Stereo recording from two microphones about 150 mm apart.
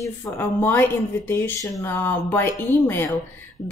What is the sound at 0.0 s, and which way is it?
Speech, 15° left (ahead or behind).